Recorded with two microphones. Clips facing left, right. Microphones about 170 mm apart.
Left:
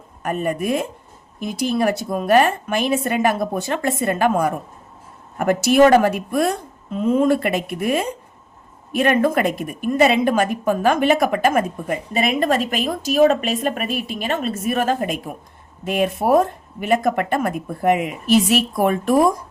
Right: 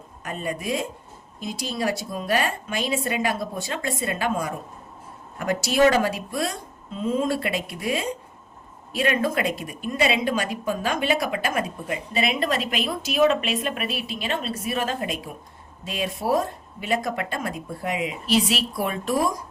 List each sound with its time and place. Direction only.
0.2 s a woman's voice: 55° left (ahead or behind)